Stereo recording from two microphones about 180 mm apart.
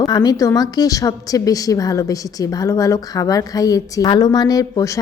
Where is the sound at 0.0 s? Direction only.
20° left (ahead or behind).